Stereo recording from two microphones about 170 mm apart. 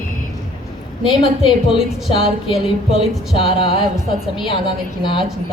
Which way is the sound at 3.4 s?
30° left (ahead or behind).